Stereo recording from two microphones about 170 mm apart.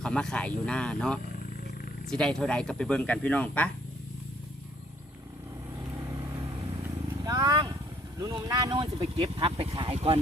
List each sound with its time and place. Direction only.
0.0 s speech: 5° left (ahead or behind)
5.8 s vehicle: 20° right (ahead or behind)
8.2 s speech: 20° right (ahead or behind)